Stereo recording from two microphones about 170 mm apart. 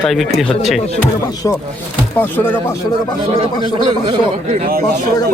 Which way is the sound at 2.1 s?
10° left (ahead or behind).